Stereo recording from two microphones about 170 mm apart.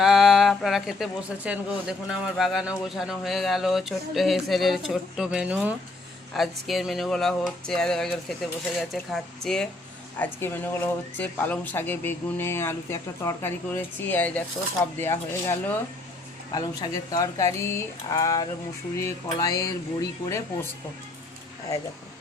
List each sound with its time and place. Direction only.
0.0 s speech: centre (ahead or behind)
16.5 s speech: 20° left (ahead or behind)